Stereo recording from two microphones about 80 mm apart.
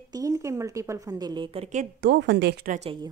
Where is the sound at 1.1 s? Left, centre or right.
Right.